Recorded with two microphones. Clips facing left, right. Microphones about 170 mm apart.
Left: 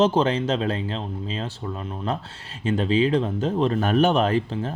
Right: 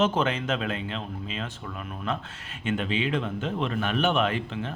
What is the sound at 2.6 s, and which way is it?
Speech, 35° left (ahead or behind).